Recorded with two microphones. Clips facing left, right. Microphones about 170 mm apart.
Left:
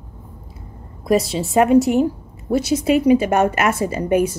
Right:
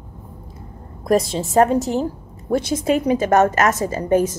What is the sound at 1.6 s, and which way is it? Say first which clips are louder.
Speech: left 4 dB; 10° left (ahead or behind).